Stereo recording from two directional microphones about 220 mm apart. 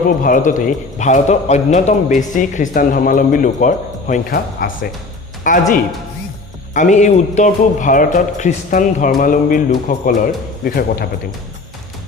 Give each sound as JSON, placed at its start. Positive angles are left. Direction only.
{"t": 0.2, "sound": "a man's voice", "side_deg": 35}